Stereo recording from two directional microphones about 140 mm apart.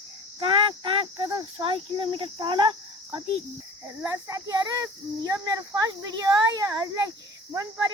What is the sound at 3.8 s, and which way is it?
A child's voice, 20° right (ahead or behind).